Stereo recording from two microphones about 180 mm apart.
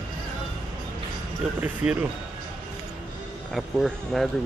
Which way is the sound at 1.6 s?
10° right (ahead or behind).